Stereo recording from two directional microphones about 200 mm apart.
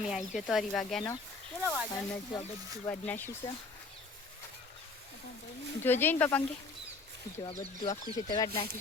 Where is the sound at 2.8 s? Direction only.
10° left (ahead or behind).